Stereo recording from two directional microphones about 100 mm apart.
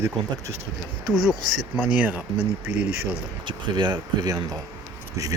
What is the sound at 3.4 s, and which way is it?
Speech, 50° right (ahead or behind).